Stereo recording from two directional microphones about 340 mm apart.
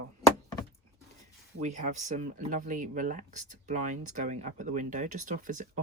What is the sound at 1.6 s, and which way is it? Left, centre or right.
Speech, right.